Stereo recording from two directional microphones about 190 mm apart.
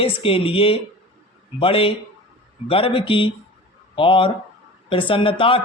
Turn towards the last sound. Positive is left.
turn(degrees=30)  # may be behind; listen again after turning